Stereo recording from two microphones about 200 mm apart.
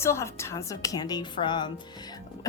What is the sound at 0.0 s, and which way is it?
A woman's voice, 15° left (ahead or behind).